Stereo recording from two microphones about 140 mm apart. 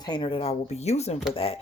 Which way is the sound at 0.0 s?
35° left (ahead or behind).